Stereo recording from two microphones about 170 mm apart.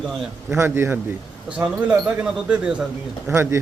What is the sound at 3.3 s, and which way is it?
Speech, 15° right (ahead or behind).